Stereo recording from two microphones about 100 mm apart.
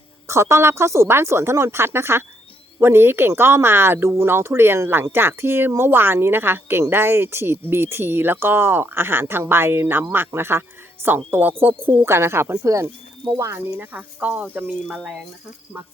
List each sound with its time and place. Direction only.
0.3 s speech: 25° right (ahead or behind)